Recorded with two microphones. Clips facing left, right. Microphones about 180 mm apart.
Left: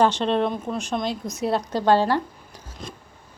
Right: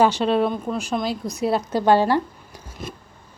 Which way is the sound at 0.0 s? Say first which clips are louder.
Right 2 dB; 5° right (ahead or behind).